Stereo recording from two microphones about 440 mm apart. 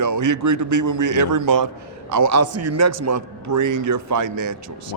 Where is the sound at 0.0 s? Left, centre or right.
Right.